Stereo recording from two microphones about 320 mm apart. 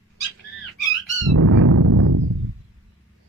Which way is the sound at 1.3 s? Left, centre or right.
Right.